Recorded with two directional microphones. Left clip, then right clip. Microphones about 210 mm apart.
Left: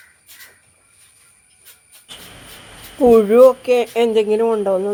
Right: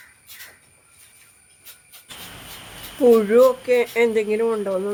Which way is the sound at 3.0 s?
15° left (ahead or behind).